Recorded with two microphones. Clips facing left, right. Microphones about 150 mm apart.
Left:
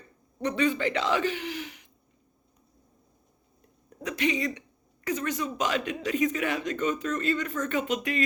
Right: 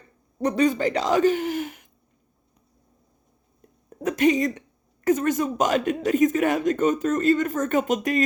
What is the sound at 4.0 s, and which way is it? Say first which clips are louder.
A woman's voice: right 8 dB; 45° right (ahead or behind).